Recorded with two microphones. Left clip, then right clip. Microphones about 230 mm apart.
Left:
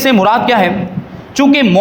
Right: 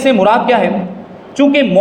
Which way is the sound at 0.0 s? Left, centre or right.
Left.